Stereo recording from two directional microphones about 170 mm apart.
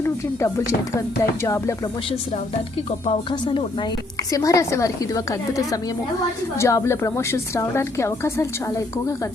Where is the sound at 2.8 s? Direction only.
35° left (ahead or behind).